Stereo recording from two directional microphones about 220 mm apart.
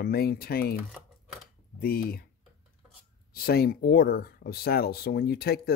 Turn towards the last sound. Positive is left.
turn(degrees=45)  # may be behind; listen again after turning